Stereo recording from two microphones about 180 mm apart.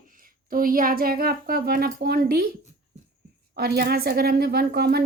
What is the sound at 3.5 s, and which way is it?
Speech, 60° right (ahead or behind).